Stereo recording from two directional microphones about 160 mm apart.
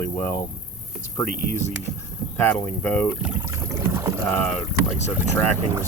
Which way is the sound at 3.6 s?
20° right (ahead or behind).